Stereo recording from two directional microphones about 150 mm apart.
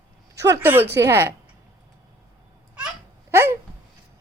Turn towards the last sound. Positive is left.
turn(degrees=-15)  # may be behind; listen again after turning